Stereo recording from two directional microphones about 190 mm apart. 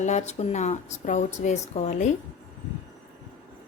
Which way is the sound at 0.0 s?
35° left (ahead or behind).